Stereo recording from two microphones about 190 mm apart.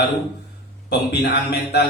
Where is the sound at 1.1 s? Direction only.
60° left (ahead or behind).